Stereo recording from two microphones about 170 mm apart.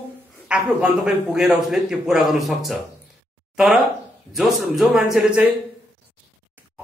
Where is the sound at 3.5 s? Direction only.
Centre (ahead or behind).